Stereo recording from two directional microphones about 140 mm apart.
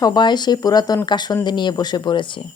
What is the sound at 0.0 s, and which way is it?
A woman's voice, 30° left (ahead or behind).